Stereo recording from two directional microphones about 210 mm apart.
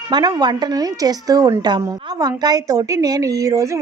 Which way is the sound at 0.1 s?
20° right (ahead or behind).